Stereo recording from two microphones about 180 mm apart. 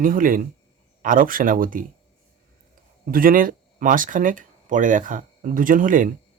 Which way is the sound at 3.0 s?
50° right (ahead or behind).